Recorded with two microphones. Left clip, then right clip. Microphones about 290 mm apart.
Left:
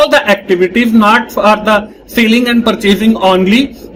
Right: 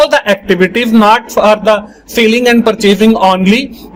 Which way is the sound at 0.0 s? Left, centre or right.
Right.